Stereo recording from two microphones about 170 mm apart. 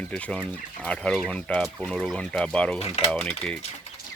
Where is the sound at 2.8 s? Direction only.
35° left (ahead or behind).